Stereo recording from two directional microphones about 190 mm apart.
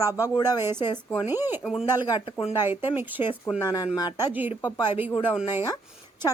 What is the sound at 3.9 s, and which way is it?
Speech, 20° left (ahead or behind).